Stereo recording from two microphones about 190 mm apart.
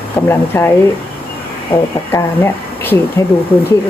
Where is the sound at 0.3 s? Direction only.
10° left (ahead or behind).